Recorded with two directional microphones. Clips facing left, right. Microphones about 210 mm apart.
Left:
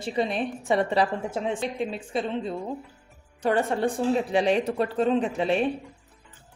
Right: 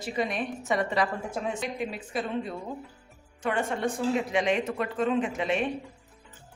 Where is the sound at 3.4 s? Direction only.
35° left (ahead or behind).